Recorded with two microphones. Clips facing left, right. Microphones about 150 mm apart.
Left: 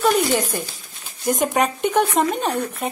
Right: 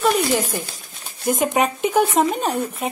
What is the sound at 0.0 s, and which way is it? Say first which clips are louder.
A woman's voice: left 1 dB; centre (ahead or behind).